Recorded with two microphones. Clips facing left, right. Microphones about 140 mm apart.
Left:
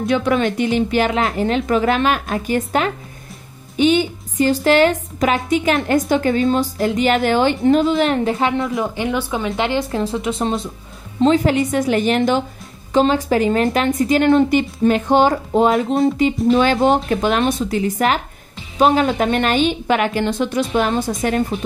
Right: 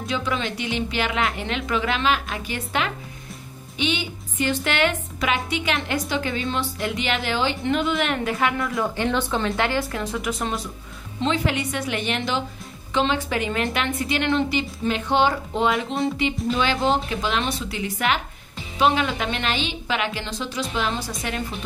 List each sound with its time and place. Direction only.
0.0 s a woman's voice: 55° left (ahead or behind)
7.6 s speech: 35° left (ahead or behind)
11.1 s a woman's voice: 40° left (ahead or behind)